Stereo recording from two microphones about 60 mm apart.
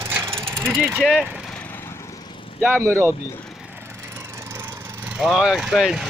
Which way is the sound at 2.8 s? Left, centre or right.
Right.